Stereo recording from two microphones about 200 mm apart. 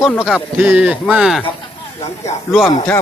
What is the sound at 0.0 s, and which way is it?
Speech, centre (ahead or behind).